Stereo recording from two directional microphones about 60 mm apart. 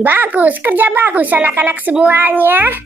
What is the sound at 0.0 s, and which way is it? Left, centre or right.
Speech, right.